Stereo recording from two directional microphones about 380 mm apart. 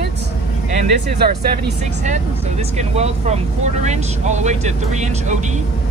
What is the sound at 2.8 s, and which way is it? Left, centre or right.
Speech, centre.